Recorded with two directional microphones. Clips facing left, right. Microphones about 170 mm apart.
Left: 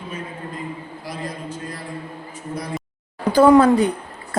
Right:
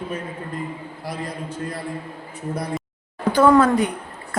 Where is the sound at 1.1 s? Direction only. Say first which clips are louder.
Right 1 dB; 60° right (ahead or behind).